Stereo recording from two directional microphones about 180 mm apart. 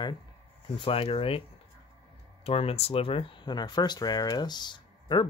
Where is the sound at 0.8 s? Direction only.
30° left (ahead or behind).